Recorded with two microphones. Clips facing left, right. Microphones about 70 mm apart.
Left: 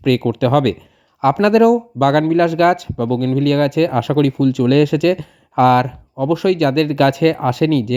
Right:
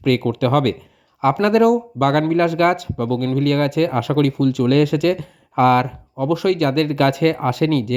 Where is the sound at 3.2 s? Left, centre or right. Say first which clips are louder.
Left 3 dB; right.